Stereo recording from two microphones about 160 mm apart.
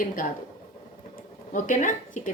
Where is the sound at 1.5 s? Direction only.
55° left (ahead or behind).